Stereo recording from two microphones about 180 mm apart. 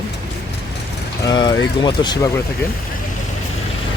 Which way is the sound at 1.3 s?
25° left (ahead or behind).